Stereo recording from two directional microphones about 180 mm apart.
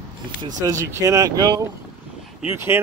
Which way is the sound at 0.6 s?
15° right (ahead or behind).